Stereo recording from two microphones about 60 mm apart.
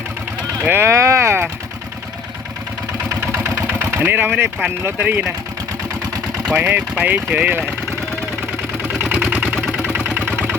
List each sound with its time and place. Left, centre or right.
0.6 s speech: right
3.8 s speech: right
6.5 s speech: right
9.3 s engine: right
10.2 s vehicle: right